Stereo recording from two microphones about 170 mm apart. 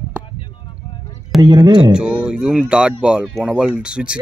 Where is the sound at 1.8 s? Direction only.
5° right (ahead or behind).